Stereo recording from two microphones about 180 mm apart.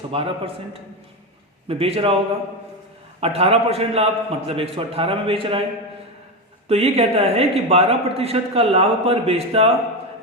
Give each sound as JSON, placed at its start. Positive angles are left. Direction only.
{"t": 0.1, "sound": "speech", "side_deg": -30}
{"t": 3.2, "sound": "speech", "side_deg": -35}
{"t": 6.7, "sound": "speech", "side_deg": -35}